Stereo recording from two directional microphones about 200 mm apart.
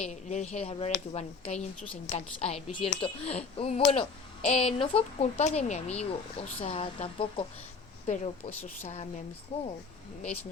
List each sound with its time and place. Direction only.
0.0 s a woman's voice: 35° left (ahead or behind)